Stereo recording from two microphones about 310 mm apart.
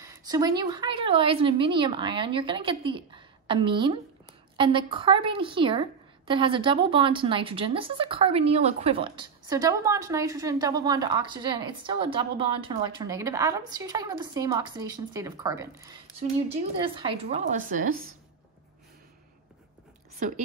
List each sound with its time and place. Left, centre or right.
0.0 s a woman's voice: centre
20.2 s speech: right